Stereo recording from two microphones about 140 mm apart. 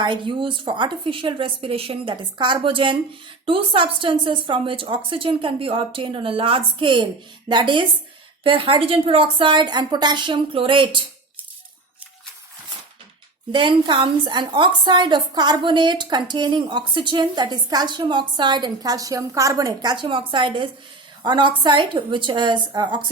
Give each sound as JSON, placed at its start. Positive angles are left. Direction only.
{"t": 0.0, "sound": "a woman's voice", "side_deg": -35}
{"t": 13.5, "sound": "a woman's voice", "side_deg": -35}